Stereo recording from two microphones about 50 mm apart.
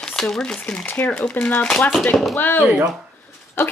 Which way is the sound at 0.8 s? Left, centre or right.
Left.